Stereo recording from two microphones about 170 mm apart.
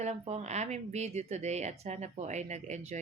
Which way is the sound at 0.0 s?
40° right (ahead or behind).